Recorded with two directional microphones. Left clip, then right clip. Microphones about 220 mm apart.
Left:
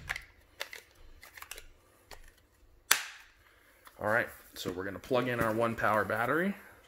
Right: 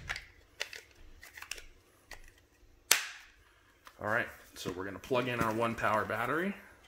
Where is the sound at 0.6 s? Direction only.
30° left (ahead or behind).